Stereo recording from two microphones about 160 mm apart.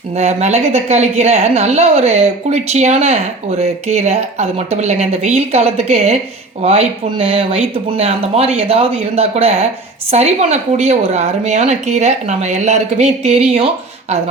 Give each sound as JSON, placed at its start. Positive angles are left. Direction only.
{"t": 0.2, "sound": "a woman's voice", "side_deg": -45}